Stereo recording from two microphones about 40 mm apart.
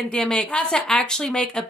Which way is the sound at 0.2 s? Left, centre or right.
Centre.